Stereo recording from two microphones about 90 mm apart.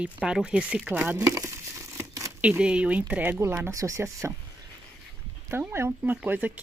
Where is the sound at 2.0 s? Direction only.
35° right (ahead or behind).